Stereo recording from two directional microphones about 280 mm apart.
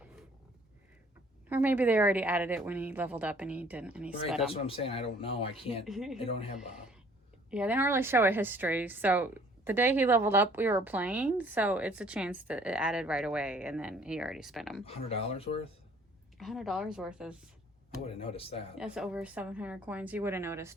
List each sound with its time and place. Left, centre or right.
1.5 s a woman's voice: centre
4.6 s speech: centre
5.8 s a woman's voice: centre
7.5 s a woman's voice: centre
14.8 s speech: left
16.4 s a woman's voice: centre
18.0 s speech: centre
18.8 s a woman's voice: centre